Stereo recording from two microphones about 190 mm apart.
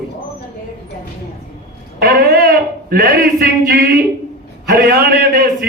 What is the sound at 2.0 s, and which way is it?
A man's voice, 55° right (ahead or behind).